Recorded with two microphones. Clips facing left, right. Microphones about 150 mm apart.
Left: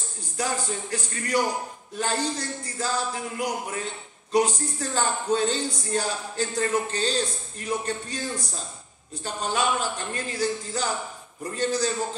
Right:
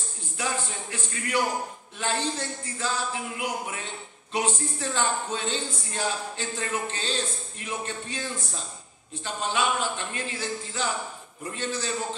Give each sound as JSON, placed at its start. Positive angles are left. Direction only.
{"t": 0.4, "sound": "a man's voice", "side_deg": 40}